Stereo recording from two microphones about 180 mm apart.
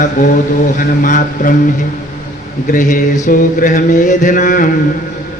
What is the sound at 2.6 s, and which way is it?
A man's voice, 45° left (ahead or behind).